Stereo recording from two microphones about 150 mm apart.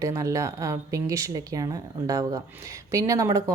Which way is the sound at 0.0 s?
20° right (ahead or behind).